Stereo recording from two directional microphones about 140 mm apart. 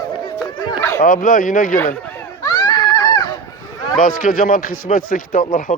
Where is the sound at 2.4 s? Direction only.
30° left (ahead or behind).